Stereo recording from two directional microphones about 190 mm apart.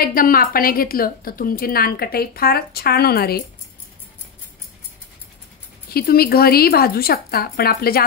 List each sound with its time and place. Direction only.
0.0 s a woman's voice: 50° left (ahead or behind)
5.9 s a woman's voice: 55° left (ahead or behind)